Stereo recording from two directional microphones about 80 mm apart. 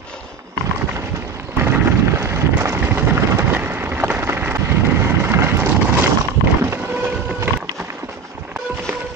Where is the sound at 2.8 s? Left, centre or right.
Right.